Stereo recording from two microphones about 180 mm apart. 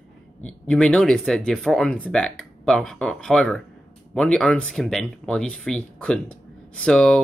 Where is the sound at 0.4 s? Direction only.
5° left (ahead or behind).